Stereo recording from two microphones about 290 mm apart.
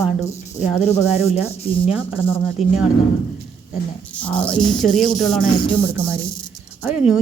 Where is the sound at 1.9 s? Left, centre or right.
Centre.